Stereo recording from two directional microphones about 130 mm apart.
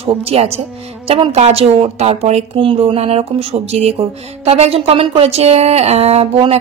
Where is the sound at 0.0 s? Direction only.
50° right (ahead or behind).